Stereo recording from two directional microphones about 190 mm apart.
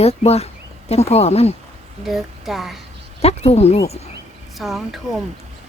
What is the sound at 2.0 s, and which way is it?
Speech, centre (ahead or behind).